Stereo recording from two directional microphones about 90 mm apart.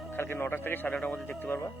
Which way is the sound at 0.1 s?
25° left (ahead or behind).